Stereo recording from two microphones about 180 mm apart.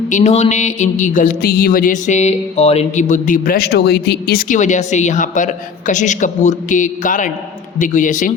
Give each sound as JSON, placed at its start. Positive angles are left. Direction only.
{"t": 0.1, "sound": "speech", "side_deg": 40}